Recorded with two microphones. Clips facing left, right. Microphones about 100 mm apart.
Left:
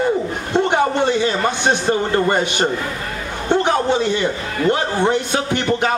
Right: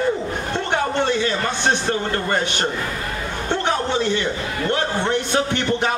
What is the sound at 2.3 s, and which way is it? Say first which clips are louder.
Speech: left 4 dB; 15° left (ahead or behind).